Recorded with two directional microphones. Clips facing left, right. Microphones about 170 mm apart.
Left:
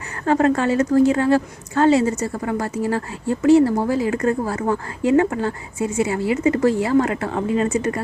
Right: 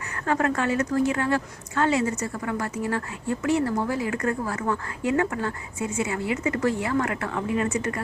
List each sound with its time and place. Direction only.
0.3 s a woman's voice: 30° left (ahead or behind)